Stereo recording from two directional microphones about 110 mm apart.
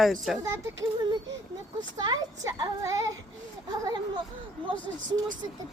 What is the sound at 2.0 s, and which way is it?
Speech, 40° right (ahead or behind).